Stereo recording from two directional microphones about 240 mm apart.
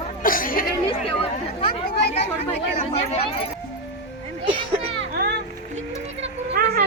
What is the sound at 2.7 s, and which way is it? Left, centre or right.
Speech, left.